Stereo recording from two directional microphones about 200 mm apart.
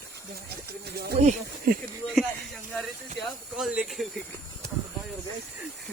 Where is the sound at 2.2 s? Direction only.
Centre (ahead or behind).